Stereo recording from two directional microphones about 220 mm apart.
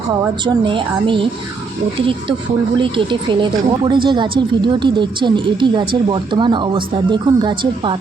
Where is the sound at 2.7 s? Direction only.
20° right (ahead or behind).